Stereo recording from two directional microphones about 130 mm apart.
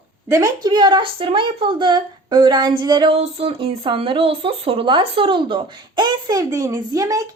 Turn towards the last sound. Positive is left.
turn(degrees=-25)  # may be behind; listen again after turning